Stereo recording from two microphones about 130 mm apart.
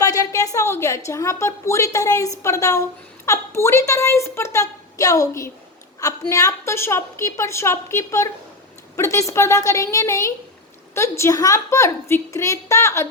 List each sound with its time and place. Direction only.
0.0 s a woman's voice: 25° left (ahead or behind)